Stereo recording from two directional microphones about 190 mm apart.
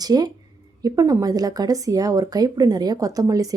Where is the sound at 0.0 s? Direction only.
20° right (ahead or behind).